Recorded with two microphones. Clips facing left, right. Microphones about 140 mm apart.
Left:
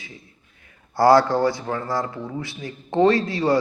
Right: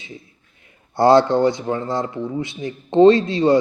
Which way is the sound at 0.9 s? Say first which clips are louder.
Right 2 dB; 25° right (ahead or behind).